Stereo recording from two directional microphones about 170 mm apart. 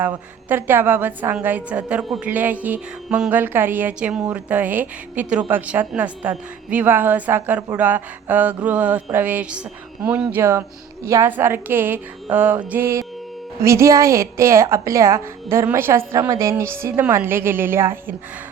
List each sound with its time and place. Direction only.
0.4 s a woman's voice: 10° right (ahead or behind)